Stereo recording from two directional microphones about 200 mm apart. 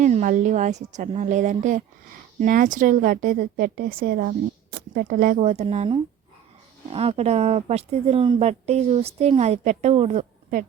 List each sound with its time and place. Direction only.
0.0 s a woman's voice: 40° right (ahead or behind)